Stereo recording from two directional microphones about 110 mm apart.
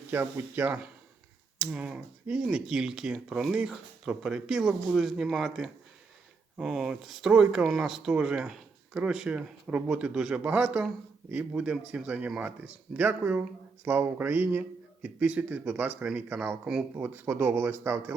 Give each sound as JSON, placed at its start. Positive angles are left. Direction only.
{"t": 0.1, "sound": "speech", "side_deg": -20}
{"t": 17.0, "sound": "speech", "side_deg": -20}